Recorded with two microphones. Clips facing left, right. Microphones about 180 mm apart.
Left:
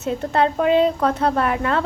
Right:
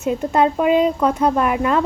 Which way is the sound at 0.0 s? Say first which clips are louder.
Right 3 dB; 15° right (ahead or behind).